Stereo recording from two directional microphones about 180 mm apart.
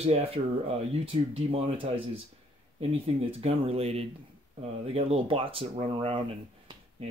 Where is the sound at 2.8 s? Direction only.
35° right (ahead or behind).